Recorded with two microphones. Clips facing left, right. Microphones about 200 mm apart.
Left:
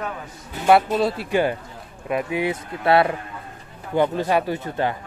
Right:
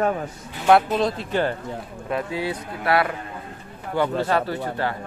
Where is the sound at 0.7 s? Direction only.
5° left (ahead or behind).